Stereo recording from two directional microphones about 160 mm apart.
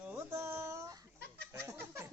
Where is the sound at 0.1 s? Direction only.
15° right (ahead or behind).